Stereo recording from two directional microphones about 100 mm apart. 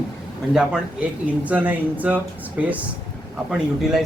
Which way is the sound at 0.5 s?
5° right (ahead or behind).